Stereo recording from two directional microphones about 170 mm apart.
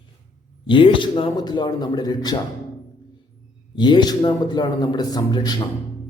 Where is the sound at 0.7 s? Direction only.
30° left (ahead or behind).